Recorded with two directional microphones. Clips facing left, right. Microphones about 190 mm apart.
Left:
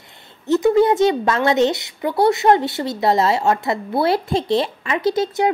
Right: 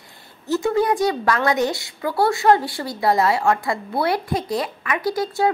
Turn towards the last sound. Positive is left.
turn(degrees=25)  # may be behind; listen again after turning